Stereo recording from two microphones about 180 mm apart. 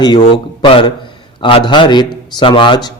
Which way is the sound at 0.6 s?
30° left (ahead or behind).